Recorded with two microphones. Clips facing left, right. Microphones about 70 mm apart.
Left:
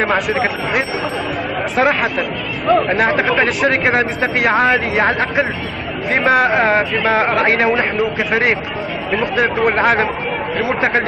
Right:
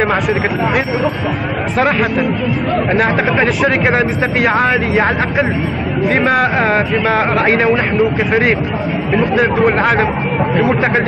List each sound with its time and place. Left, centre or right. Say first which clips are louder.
0.0 s speech: right 2 dB; centre